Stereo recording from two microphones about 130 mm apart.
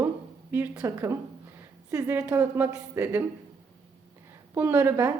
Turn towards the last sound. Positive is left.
turn(degrees=-15)  # may be behind; listen again after turning